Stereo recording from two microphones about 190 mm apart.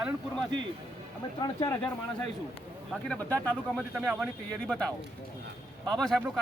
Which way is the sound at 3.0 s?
5° left (ahead or behind).